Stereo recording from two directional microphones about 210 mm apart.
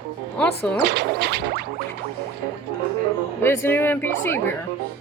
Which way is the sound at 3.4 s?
10° left (ahead or behind).